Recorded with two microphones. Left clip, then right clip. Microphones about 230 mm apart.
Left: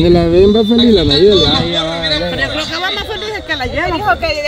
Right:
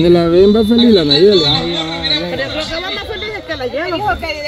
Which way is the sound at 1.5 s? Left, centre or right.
Left.